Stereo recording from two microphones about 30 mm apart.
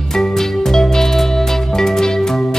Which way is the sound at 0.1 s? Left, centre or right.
Centre.